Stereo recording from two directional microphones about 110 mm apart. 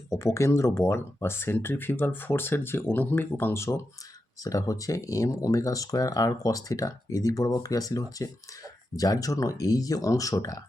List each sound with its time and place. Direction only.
0.1 s speech: 25° left (ahead or behind)